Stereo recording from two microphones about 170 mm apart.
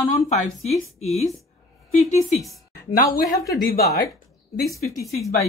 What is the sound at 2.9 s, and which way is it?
Speech, 55° left (ahead or behind).